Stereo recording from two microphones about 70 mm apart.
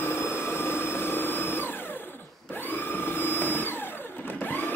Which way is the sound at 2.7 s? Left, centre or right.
Left.